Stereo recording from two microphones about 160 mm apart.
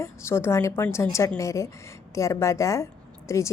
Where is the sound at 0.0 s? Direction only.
15° left (ahead or behind).